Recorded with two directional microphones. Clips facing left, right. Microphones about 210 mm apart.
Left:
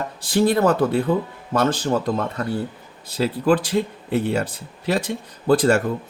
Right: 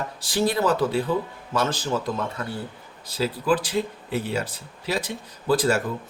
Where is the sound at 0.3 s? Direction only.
55° left (ahead or behind).